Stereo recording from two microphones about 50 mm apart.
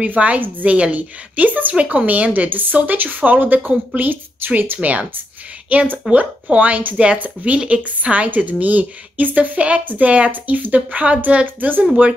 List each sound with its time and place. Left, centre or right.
0.0 s a woman's voice: right
5.7 s a woman's voice: right